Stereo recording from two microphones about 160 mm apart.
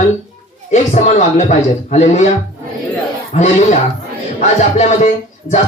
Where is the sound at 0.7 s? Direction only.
45° left (ahead or behind).